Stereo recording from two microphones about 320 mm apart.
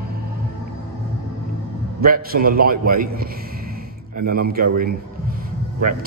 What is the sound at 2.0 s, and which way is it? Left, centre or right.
A man's voice, right.